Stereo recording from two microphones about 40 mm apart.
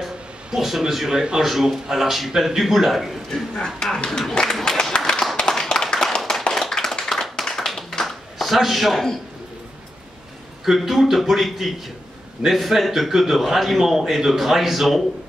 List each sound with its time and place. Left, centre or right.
0.6 s a man's voice: centre
3.5 s speech: centre
4.3 s a sound: centre
5.3 s clapping: centre
6.5 s tap: centre
7.0 s clapping: centre
10.6 s a man's voice: centre